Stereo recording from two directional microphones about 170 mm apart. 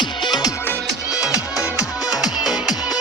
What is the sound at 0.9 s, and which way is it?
Music, 5° right (ahead or behind).